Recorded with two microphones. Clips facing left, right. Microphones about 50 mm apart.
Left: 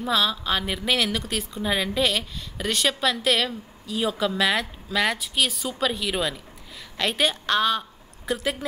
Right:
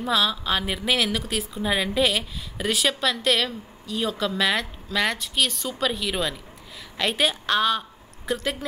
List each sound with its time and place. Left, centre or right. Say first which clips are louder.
0.0 s a woman's voice: even; centre